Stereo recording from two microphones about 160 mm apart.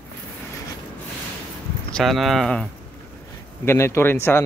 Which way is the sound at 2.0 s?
Centre (ahead or behind).